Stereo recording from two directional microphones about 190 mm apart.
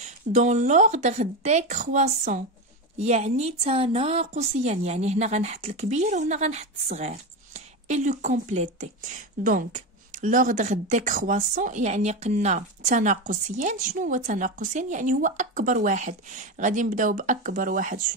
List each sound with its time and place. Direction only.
0.0 s speech: 40° right (ahead or behind)